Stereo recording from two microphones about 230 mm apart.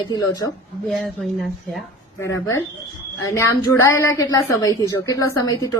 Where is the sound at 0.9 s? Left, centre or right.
Centre.